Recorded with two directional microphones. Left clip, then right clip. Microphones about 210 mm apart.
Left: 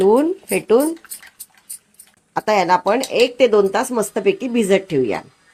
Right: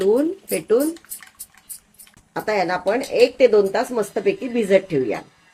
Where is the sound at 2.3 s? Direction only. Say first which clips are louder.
Left 6 dB; 40° left (ahead or behind).